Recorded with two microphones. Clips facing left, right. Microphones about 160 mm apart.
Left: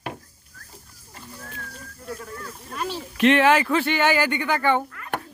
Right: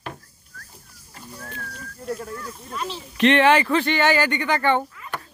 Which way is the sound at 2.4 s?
55° left (ahead or behind).